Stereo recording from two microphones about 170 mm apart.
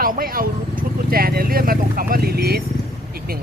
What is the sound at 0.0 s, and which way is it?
Speech, 55° right (ahead or behind).